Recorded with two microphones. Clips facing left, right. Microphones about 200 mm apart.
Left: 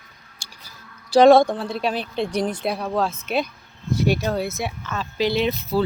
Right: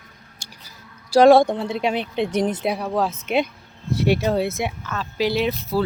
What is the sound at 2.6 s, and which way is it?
Speech, 10° right (ahead or behind).